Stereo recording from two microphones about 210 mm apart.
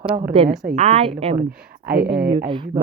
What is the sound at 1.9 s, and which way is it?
Speech, 50° right (ahead or behind).